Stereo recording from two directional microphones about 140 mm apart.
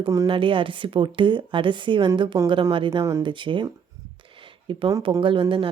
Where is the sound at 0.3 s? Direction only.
40° right (ahead or behind).